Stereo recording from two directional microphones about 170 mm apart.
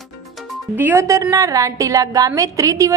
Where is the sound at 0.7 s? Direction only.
15° right (ahead or behind).